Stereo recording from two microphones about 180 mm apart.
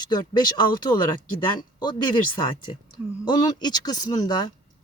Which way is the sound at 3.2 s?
25° left (ahead or behind).